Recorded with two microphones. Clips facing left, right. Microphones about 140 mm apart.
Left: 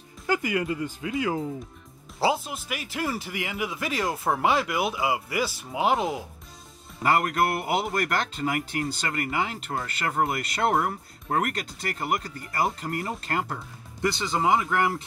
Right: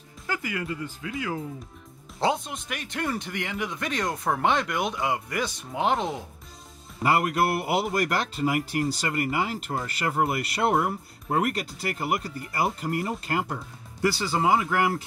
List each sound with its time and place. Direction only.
0.3 s speech: 20° left (ahead or behind)
2.1 s speech: 5° left (ahead or behind)